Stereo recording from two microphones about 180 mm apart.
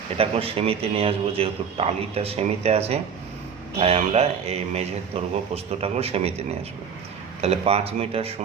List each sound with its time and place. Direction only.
0.2 s a man's voice: 30° right (ahead or behind)
7.4 s a man's voice: 35° right (ahead or behind)